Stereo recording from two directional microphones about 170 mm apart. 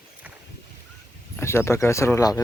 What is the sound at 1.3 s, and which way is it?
Speech, 15° left (ahead or behind).